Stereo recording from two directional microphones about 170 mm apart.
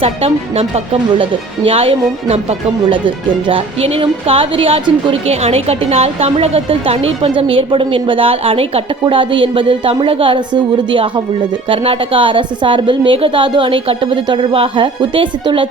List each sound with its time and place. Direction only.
0.0 s a woman's voice: 35° right (ahead or behind)
3.5 s a woman's voice: 35° right (ahead or behind)